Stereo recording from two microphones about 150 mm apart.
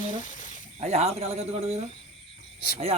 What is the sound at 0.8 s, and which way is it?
Speech, 45° right (ahead or behind).